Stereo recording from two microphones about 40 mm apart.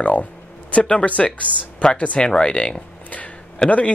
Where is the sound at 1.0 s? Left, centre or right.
Left.